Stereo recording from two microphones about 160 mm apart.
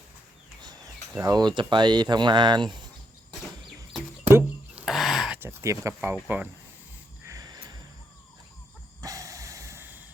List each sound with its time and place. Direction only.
0.6 s speech: 25° right (ahead or behind)
4.2 s a sound: 10° right (ahead or behind)
4.9 s a sound: centre (ahead or behind)
5.4 s speech: 15° right (ahead or behind)
7.3 s music: 25° right (ahead or behind)
9.0 s music: 20° right (ahead or behind)